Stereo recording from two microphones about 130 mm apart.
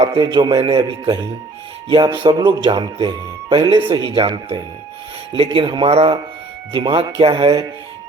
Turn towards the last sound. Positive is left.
turn(degrees=-40)  # may be behind; listen again after turning